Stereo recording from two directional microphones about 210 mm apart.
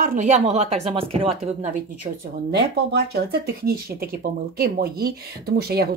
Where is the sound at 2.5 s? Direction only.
50° right (ahead or behind).